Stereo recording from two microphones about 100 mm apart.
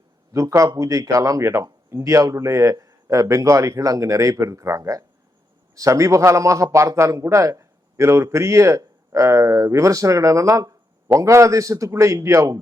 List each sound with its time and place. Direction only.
0.3 s a man's voice: 35° right (ahead or behind)